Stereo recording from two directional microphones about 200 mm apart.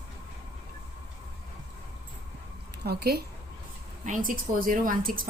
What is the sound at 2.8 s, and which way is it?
Speech, 50° right (ahead or behind).